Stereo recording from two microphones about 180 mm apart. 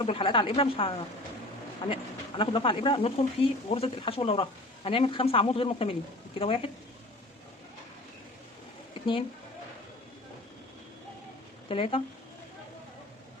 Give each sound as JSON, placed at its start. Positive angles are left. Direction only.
{"t": 0.0, "sound": "a woman's voice", "side_deg": 30}
{"t": 11.7, "sound": "speech", "side_deg": 30}